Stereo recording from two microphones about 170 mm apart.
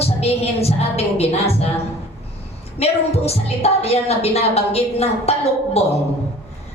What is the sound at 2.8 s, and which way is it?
A woman's voice, 35° left (ahead or behind).